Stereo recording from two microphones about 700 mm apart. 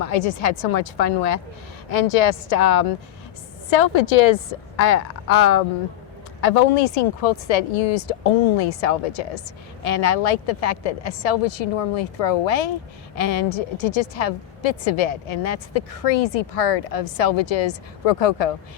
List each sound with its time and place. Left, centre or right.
0.0 s a woman's voice: left